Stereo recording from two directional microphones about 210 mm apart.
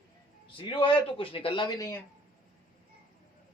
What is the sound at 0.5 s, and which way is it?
A man's voice, 25° left (ahead or behind).